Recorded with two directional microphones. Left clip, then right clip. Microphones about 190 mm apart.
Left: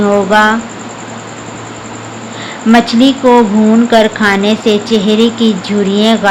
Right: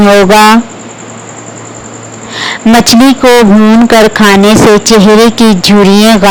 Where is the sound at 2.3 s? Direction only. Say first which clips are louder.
Right 4 dB; 55° right (ahead or behind).